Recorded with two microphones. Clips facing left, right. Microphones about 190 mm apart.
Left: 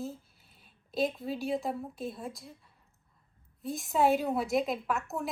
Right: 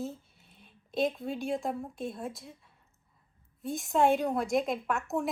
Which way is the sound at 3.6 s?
Centre (ahead or behind).